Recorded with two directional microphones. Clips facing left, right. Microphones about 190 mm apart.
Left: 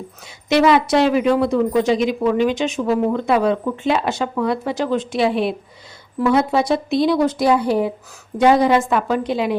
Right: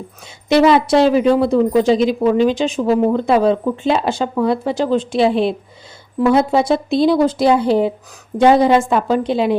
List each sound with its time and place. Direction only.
0.4 s a woman's voice: 30° right (ahead or behind)